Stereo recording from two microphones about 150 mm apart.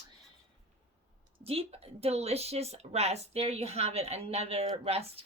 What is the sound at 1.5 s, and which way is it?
Speech, 40° right (ahead or behind).